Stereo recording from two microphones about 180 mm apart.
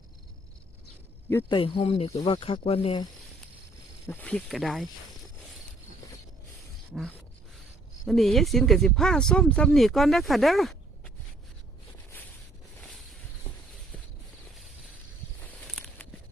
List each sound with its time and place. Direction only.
1.5 s speech: 30° left (ahead or behind)
4.1 s speech: 5° left (ahead or behind)
8.0 s speech: centre (ahead or behind)